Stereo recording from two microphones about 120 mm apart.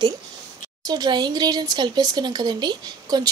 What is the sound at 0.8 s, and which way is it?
Speech, 35° right (ahead or behind).